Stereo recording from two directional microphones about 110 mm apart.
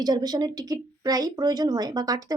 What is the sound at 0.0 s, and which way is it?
Speech, 40° right (ahead or behind).